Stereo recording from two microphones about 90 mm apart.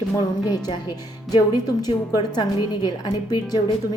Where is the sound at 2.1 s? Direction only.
50° left (ahead or behind).